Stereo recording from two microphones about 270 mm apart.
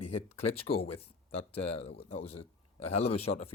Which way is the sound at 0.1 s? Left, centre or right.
Left.